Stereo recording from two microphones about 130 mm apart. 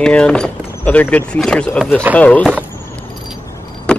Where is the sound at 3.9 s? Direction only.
5° left (ahead or behind).